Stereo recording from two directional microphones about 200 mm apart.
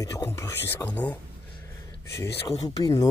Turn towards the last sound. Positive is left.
turn(degrees=20)  # may be behind; listen again after turning